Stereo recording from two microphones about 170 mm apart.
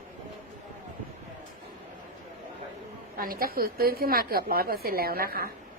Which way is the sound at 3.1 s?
60° right (ahead or behind).